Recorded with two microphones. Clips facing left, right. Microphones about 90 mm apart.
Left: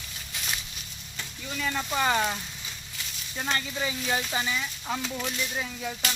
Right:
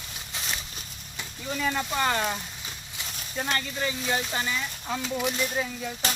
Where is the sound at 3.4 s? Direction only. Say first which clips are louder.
Right 1 dB; centre (ahead or behind).